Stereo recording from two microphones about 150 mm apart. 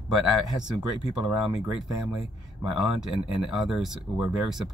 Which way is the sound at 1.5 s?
5° right (ahead or behind).